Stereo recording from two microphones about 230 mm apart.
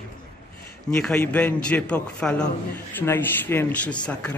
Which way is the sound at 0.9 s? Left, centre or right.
Centre.